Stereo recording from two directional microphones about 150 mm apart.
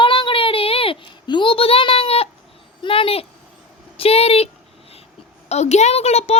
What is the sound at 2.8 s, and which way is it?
Speech, 35° left (ahead or behind).